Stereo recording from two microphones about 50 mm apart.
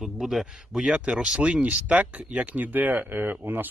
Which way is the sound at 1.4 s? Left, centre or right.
Right.